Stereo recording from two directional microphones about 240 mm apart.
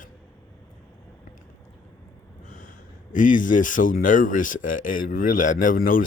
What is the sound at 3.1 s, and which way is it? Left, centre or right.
Speech, left.